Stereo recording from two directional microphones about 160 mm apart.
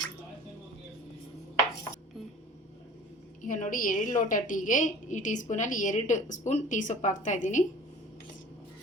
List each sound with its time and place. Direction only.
3.4 s a woman's voice: 55° left (ahead or behind)